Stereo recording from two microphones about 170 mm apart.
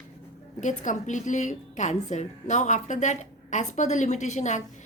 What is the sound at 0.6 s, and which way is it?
A woman's voice, 45° left (ahead or behind).